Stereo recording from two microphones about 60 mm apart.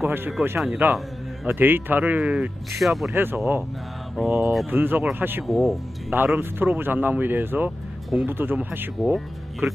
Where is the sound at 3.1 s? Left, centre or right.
Right.